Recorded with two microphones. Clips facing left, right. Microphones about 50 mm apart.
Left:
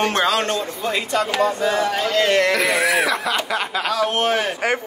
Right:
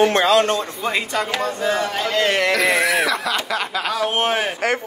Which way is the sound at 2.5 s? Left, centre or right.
Centre.